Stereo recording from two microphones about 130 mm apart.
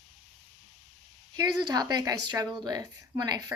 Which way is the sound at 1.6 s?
30° right (ahead or behind).